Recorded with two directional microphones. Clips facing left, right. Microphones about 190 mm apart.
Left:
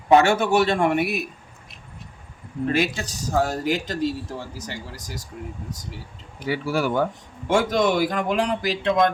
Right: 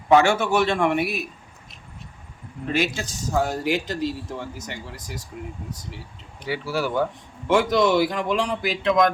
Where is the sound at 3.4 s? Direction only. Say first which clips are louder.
Even; 40° left (ahead or behind).